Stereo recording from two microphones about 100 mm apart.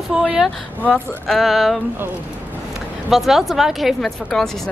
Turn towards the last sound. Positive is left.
turn(degrees=0)  # may be behind; listen again after turning